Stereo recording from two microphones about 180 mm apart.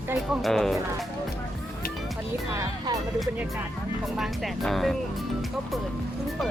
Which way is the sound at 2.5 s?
20° right (ahead or behind).